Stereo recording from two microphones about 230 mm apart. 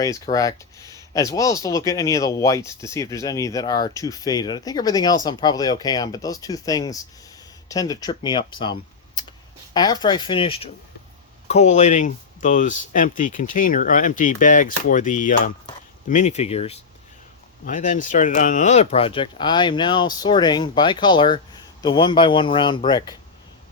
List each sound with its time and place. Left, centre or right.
0.3 s speech: centre